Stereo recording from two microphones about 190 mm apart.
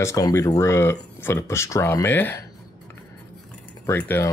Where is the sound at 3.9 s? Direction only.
10° left (ahead or behind).